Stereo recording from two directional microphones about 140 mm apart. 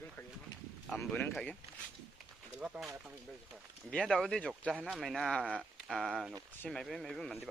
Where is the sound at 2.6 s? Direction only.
5° right (ahead or behind).